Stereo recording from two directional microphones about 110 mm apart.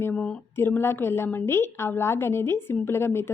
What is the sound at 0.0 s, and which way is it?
A woman's voice, 15° left (ahead or behind).